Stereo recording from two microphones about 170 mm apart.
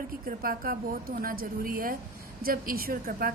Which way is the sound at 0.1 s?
60° right (ahead or behind).